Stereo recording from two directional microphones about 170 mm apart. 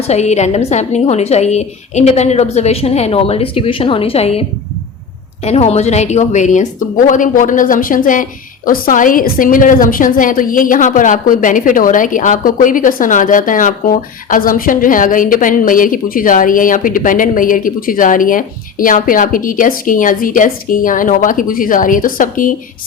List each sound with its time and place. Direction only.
0.1 s a woman's voice: 40° left (ahead or behind)
5.5 s a woman's voice: 40° left (ahead or behind)